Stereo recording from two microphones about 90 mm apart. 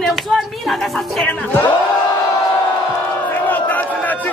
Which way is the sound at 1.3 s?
15° left (ahead or behind).